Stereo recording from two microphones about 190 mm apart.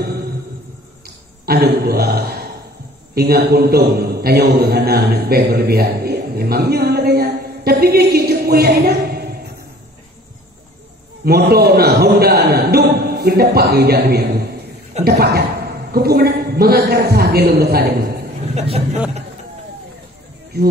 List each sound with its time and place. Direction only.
1.0 s a sound: 55° right (ahead or behind)
3.2 s a man's voice: 55° right (ahead or behind)
11.2 s a man's voice: 55° right (ahead or behind)
18.5 s speech: 35° right (ahead or behind)
20.5 s a man's voice: 55° right (ahead or behind)